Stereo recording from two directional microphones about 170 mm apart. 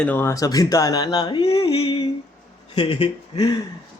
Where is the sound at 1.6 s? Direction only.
35° left (ahead or behind).